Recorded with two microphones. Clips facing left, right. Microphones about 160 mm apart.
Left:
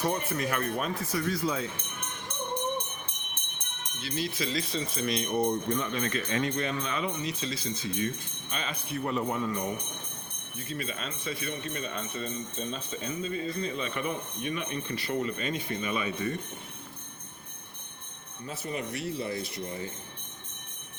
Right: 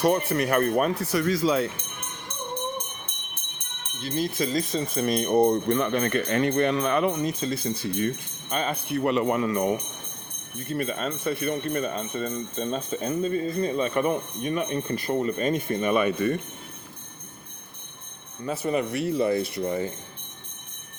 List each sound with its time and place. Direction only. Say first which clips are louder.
0.0 s speech: right 7 dB; 70° right (ahead or behind)
4.0 s speech: right 6 dB; 45° right (ahead or behind); by 9.7 s 70° right (ahead or behind)
10.6 s speech: right 8 dB; 50° right (ahead or behind)
18.4 s speech: right 9 dB; 65° right (ahead or behind)